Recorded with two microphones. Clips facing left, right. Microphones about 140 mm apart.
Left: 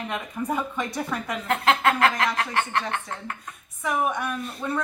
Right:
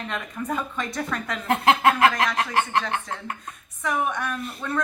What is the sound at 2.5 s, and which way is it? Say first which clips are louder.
Speech: right 3 dB; 30° right (ahead or behind).